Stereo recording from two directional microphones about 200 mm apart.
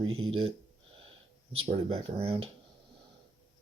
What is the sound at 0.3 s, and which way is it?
Speech, 30° right (ahead or behind).